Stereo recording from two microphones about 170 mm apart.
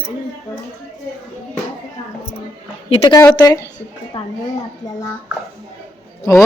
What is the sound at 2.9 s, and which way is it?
Speech, 35° left (ahead or behind).